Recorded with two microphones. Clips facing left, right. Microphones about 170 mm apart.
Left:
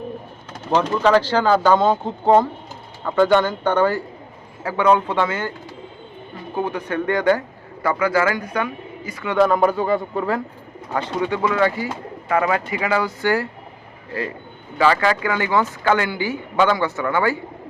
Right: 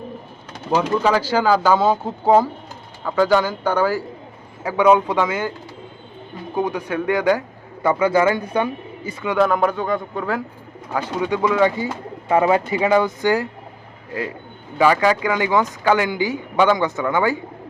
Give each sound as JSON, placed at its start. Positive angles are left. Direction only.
{"t": 0.7, "sound": "speech", "side_deg": -10}
{"t": 6.6, "sound": "speech", "side_deg": -10}
{"t": 7.8, "sound": "speech", "side_deg": -25}
{"t": 9.4, "sound": "speech", "side_deg": 0}
{"t": 11.2, "sound": "speech", "side_deg": -10}